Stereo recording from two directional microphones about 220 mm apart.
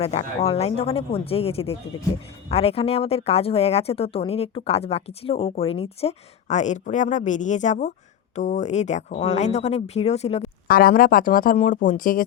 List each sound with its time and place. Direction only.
0.0 s speech: 30° left (ahead or behind)
10.7 s speech: 40° left (ahead or behind)